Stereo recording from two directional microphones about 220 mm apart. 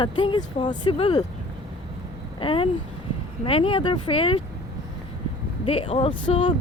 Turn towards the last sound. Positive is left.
turn(degrees=20)  # may be behind; listen again after turning